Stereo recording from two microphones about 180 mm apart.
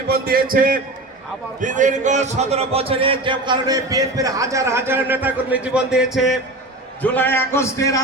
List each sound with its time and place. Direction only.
0.1 s a man's voice: 55° right (ahead or behind); by 6.4 s centre (ahead or behind)
7.0 s a man's voice: 10° left (ahead or behind)